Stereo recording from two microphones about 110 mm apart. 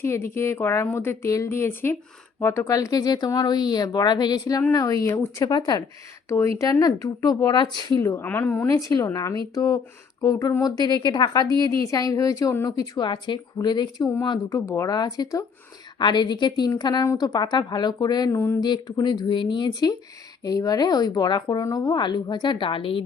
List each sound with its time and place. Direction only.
0.0 s a woman's voice: 25° left (ahead or behind); by 5.8 s 40° left (ahead or behind)
6.2 s speech: 25° left (ahead or behind); by 8.0 s 40° left (ahead or behind)
8.0 s a woman's voice: 20° left (ahead or behind)
8.8 s speech: 30° left (ahead or behind)
14.5 s speech: 30° left (ahead or behind)
18.3 s a woman's voice: 20° left (ahead or behind)
18.6 s speech: 40° left (ahead or behind)